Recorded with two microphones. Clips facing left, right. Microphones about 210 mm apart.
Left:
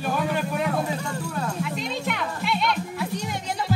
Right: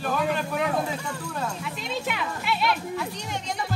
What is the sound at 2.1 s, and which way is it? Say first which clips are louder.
Music: left 2 dB; 5° right (ahead or behind).